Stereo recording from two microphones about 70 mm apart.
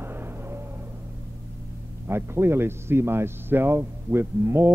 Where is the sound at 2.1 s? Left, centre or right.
Right.